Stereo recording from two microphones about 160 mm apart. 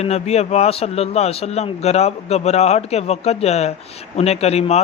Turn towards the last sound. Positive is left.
turn(degrees=40)  # may be behind; listen again after turning